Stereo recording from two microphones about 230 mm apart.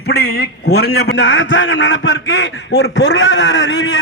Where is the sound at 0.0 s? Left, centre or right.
Left.